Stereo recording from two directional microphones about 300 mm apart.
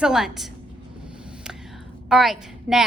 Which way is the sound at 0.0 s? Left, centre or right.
Centre.